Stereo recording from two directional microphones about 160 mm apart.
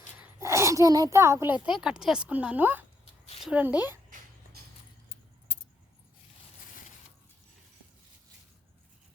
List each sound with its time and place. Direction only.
0.2 s a child's voice: 20° right (ahead or behind)